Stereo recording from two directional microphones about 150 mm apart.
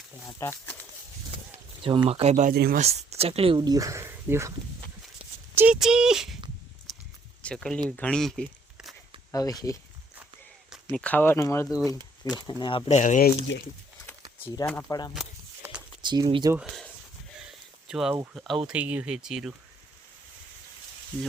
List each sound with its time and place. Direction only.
0.3 s speech: 20° left (ahead or behind)
1.8 s speech: 35° right (ahead or behind)
2.5 s speech: 85° right
2.8 s speech: 45° right (ahead or behind); by 4.5 s 15° right (ahead or behind)
5.5 s speech: 5° right (ahead or behind)
7.4 s speech: 5° left (ahead or behind)
9.3 s speech: 25° left (ahead or behind)
10.9 s speech: 10° left (ahead or behind)
12.5 s speech: 30° left (ahead or behind)
12.9 s speech: 55° left (ahead or behind)
14.8 s speech: 25° left (ahead or behind)
16.0 s speech: 30° right (ahead or behind)
17.4 s a sound: 5° right (ahead or behind)
18.3 s speech: centre (ahead or behind)